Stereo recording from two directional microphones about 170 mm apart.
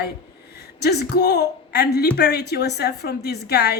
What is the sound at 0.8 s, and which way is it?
A woman's voice, 70° left (ahead or behind).